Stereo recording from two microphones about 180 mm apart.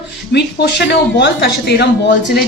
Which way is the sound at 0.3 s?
70° left (ahead or behind).